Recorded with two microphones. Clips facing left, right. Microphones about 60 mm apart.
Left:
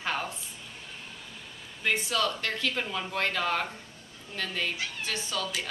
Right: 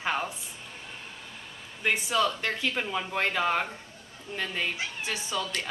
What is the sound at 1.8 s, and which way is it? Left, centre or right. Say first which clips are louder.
Speech: right 2 dB; centre.